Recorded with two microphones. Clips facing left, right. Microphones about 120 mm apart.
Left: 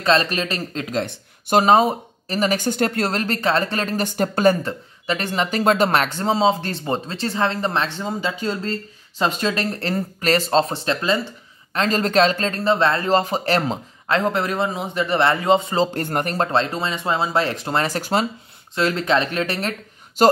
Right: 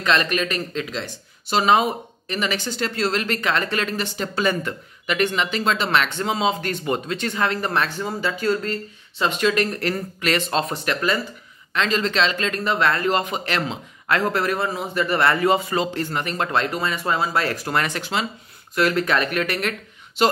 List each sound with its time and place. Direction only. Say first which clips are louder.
0.0 s speech: left 2 dB; 30° left (ahead or behind)
9.2 s speech: right 1 dB; 35° left (ahead or behind)
11.7 s speech: left 3 dB; 40° left (ahead or behind)
14.0 s a man's voice: left 1 dB; 25° left (ahead or behind)
15.9 s speech: left 3 dB; 50° left (ahead or behind)
16.3 s a man's voice: left 1 dB; 25° left (ahead or behind)
18.8 s a man's voice: left 1 dB; 25° left (ahead or behind)
20.2 s speech: left 5 dB; 40° left (ahead or behind)